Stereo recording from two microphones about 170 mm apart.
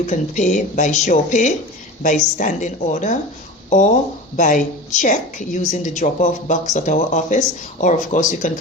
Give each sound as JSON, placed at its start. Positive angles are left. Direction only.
{"t": 0.0, "sound": "a woman's voice", "side_deg": 45}